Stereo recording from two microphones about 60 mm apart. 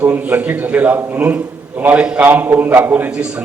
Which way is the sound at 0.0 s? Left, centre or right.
Right.